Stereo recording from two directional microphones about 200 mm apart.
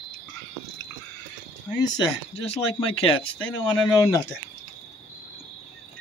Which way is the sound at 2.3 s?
30° left (ahead or behind).